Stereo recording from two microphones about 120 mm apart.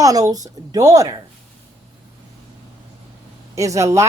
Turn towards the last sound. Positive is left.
turn(degrees=-25)  # may be behind; listen again after turning